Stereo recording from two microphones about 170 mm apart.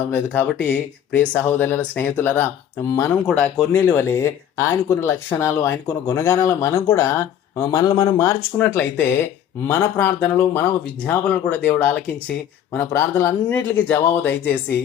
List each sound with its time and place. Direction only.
0.1 s speech: 10° left (ahead or behind)